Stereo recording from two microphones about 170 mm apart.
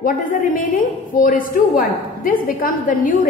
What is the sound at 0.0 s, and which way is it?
A woman's voice, 55° left (ahead or behind).